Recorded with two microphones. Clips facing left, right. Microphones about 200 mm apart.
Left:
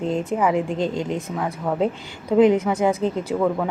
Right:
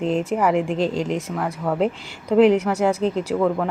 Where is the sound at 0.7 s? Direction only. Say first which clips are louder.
Right 2 dB; 30° right (ahead or behind).